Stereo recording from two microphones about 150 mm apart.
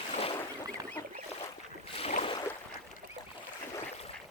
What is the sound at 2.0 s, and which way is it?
Boat, 45° left (ahead or behind).